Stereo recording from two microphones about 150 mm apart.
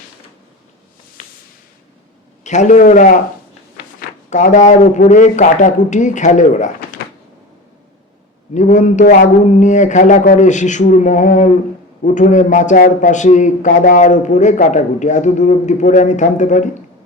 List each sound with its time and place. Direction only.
2.4 s a man's voice: 55° left (ahead or behind)
4.3 s a man's voice: 55° left (ahead or behind)
8.5 s a man's voice: 55° left (ahead or behind)